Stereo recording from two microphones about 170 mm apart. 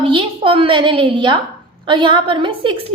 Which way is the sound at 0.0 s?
30° right (ahead or behind).